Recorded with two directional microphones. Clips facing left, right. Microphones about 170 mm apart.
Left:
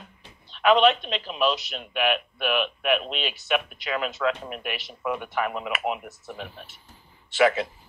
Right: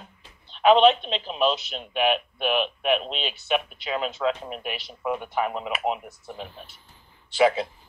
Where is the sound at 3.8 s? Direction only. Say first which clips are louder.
Even; 35° right (ahead or behind).